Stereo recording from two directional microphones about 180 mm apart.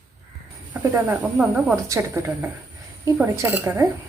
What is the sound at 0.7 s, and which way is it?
Speech, 10° right (ahead or behind).